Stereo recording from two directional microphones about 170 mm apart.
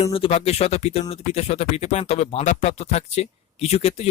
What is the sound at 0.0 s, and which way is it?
Speech, 35° left (ahead or behind).